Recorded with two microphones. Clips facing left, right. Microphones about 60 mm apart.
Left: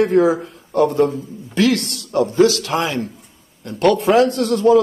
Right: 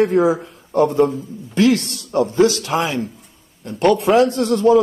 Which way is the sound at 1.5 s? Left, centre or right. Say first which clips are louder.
Right 1 dB; right.